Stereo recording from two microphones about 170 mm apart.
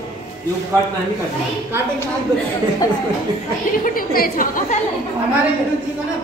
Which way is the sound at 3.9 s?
55° left (ahead or behind).